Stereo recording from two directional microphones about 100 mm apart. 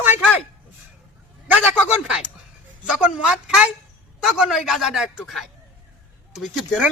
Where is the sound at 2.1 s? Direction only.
5° right (ahead or behind).